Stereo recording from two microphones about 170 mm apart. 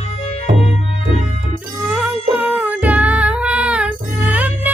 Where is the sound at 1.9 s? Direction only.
10° right (ahead or behind).